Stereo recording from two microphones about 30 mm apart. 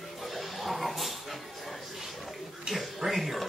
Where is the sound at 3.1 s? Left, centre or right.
Centre.